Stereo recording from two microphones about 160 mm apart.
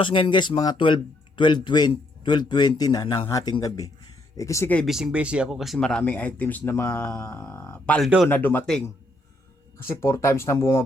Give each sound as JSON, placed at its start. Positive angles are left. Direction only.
{"t": 0.0, "sound": "speech", "side_deg": 30}
{"t": 4.9, "sound": "speech", "side_deg": -5}